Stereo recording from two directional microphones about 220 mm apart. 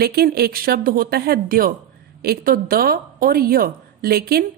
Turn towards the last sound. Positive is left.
turn(degrees=-45)  # may be behind; listen again after turning